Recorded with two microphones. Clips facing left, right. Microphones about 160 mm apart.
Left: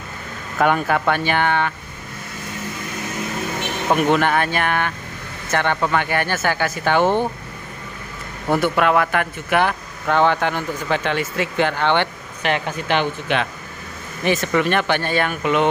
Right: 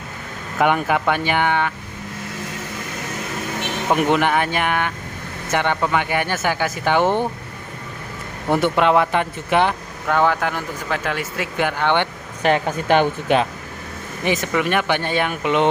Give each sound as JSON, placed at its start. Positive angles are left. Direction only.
{"t": 0.6, "sound": "speech", "side_deg": -15}
{"t": 3.9, "sound": "speech", "side_deg": -15}
{"t": 8.5, "sound": "speech", "side_deg": -20}
{"t": 10.0, "sound": "speech", "side_deg": -5}
{"t": 12.4, "sound": "speech", "side_deg": -40}
{"t": 14.2, "sound": "speech", "side_deg": -15}